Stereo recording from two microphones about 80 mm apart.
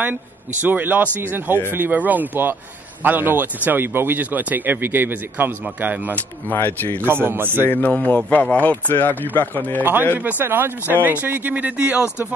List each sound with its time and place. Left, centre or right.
0.0 s speech: right
6.1 s a man's voice: left
7.0 s speech: right
7.7 s a man's voice: left
10.1 s speech: right